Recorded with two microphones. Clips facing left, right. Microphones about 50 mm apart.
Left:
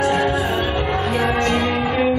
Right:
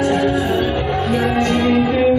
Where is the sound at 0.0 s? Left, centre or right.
Centre.